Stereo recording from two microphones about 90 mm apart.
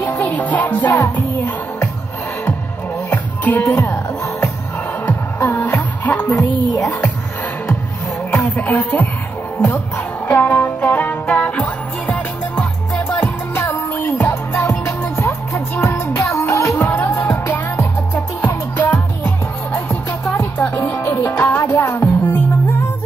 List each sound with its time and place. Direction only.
0.0 s music: 20° left (ahead or behind)
3.1 s music: 20° left (ahead or behind)
8.5 s music: 20° left (ahead or behind)
16.9 s music: 20° left (ahead or behind)